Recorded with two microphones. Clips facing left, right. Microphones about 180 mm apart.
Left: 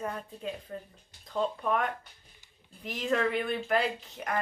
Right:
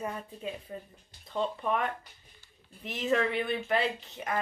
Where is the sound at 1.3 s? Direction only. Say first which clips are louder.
Left 1 dB; centre (ahead or behind).